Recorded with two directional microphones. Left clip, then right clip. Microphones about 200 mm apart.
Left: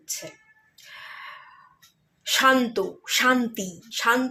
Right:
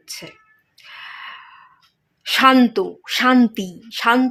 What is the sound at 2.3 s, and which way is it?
A woman's voice, 45° right (ahead or behind).